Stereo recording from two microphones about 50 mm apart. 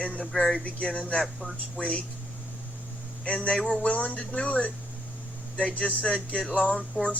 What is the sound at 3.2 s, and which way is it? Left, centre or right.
Speech, left.